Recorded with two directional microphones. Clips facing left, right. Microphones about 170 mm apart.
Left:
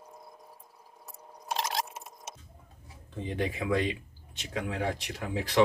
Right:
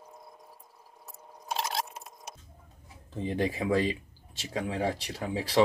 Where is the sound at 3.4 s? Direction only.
30° right (ahead or behind).